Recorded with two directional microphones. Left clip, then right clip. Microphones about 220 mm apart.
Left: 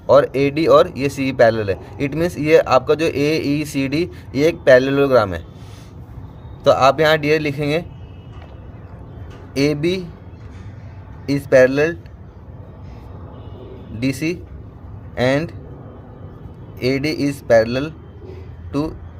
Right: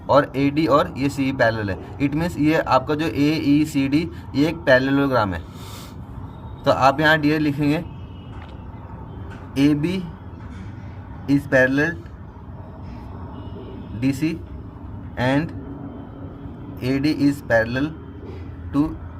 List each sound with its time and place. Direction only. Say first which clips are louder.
0.1 s speech: left 4 dB; 40° left (ahead or behind)
6.7 s speech: left 3 dB; 40° left (ahead or behind)
9.6 s speech: left 2 dB; 40° left (ahead or behind)
11.3 s speech: left 5 dB; 40° left (ahead or behind)
14.0 s a man's voice: left 2 dB; 40° left (ahead or behind)
16.8 s speech: left 1 dB; 40° left (ahead or behind)